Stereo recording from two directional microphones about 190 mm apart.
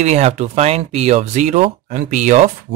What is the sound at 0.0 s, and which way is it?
Speech, 35° right (ahead or behind).